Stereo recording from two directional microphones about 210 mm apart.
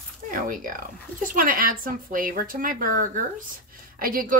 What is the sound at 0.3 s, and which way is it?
A woman's voice, 40° right (ahead or behind).